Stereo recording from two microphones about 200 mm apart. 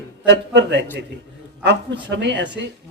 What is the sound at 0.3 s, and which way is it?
A man's voice, 60° right (ahead or behind).